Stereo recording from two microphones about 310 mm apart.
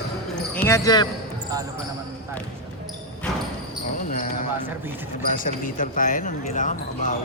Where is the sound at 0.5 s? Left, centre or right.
Centre.